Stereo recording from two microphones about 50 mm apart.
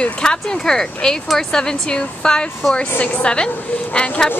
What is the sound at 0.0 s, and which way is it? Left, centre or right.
A woman's voice, centre.